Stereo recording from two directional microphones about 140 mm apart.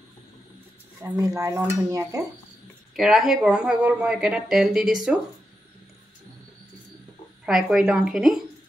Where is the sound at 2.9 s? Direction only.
Centre (ahead or behind).